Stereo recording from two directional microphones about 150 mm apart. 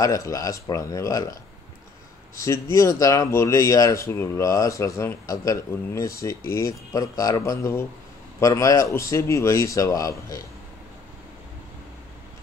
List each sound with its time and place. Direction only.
0.0 s speech: 20° left (ahead or behind)
2.3 s speech: 20° left (ahead or behind)